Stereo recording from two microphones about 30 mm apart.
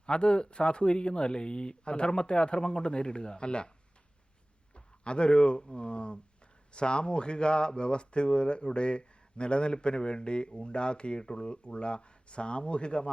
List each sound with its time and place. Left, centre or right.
0.0 s speech: left
4.7 s speech: left